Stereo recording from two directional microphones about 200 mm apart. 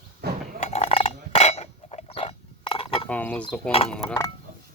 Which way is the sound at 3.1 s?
5° left (ahead or behind).